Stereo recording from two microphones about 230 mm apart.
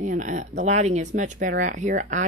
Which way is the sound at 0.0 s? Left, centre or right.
Right.